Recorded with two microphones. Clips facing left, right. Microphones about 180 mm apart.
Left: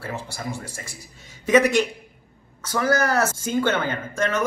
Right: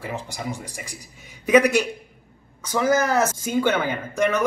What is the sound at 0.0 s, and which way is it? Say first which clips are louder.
A man's voice: right 1 dB; 15° right (ahead or behind).